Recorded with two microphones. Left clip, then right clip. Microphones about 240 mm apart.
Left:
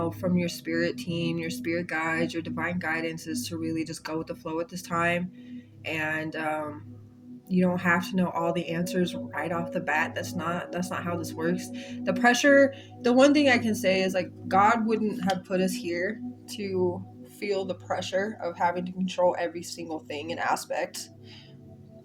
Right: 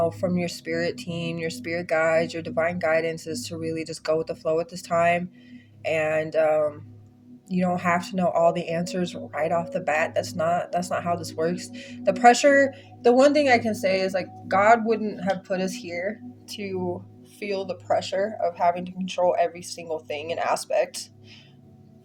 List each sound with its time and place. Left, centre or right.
0.0 s speech: right
19.5 s speech: centre
19.8 s speech: right